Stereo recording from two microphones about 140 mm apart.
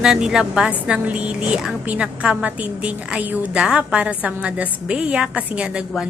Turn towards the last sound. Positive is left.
turn(degrees=-5)  # may be behind; listen again after turning